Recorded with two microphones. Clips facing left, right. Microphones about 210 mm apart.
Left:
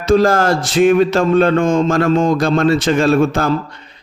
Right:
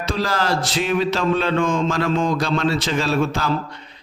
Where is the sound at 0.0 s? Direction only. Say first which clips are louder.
Left 10 dB; 50° left (ahead or behind).